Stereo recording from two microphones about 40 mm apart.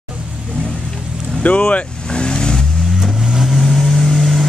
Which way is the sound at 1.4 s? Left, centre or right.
Left.